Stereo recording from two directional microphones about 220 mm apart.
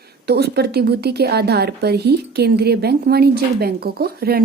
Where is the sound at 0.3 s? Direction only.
45° right (ahead or behind).